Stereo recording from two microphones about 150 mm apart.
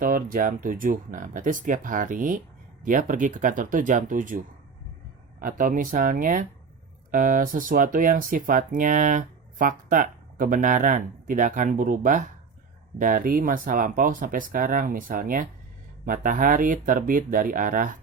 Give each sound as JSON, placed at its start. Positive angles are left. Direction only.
{"t": 0.0, "sound": "speech", "side_deg": -65}